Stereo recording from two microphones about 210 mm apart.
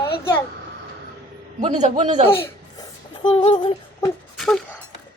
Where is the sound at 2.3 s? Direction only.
25° left (ahead or behind).